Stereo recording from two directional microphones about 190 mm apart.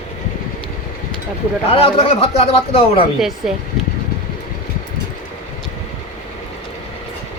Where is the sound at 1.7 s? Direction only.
30° left (ahead or behind).